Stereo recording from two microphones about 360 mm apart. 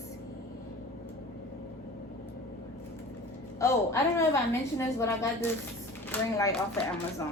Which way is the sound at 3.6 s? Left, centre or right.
Centre.